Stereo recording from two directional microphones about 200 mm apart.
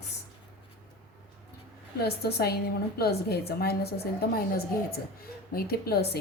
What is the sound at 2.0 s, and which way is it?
A woman's voice, 55° left (ahead or behind).